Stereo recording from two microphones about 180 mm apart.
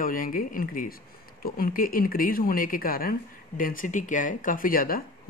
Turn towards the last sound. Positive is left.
turn(degrees=55)  # may be behind; listen again after turning